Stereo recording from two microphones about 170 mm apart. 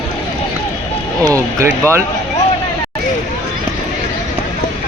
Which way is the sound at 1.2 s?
20° right (ahead or behind).